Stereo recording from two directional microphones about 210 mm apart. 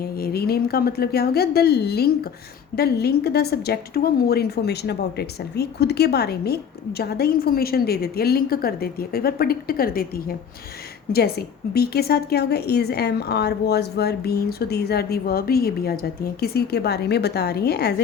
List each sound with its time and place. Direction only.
0.0 s a woman's voice: 50° left (ahead or behind)